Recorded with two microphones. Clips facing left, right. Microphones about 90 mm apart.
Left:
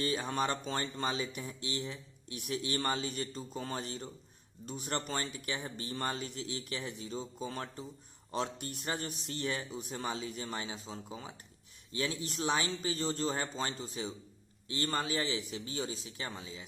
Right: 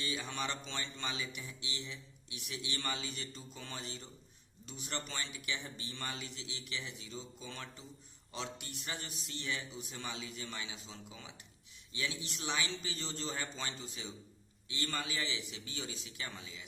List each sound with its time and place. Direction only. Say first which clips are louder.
0.0 s a man's voice: left 7 dB; 45° left (ahead or behind)